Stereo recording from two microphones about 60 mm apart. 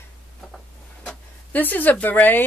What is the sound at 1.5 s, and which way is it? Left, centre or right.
Speech, left.